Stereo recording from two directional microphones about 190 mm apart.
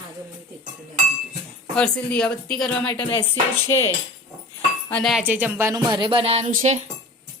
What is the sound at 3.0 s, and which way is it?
Music, 25° left (ahead or behind).